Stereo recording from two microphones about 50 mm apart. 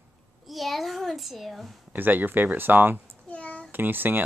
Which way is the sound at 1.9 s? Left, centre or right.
Right.